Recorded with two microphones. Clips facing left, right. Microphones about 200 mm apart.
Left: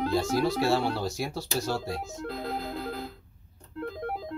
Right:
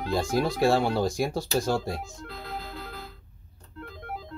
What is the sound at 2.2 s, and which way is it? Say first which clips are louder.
Music: left 5 dB; 45° left (ahead or behind).